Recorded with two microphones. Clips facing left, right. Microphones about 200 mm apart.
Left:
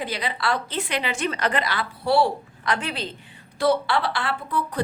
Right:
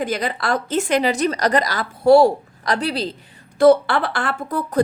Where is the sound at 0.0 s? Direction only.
45° right (ahead or behind).